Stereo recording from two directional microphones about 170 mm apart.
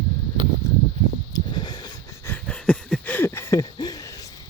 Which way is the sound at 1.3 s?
25° left (ahead or behind).